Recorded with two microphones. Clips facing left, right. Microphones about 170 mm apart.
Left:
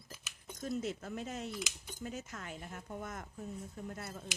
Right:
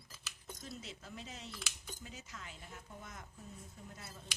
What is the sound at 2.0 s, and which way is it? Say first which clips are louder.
Speech: left 9 dB; 50° left (ahead or behind).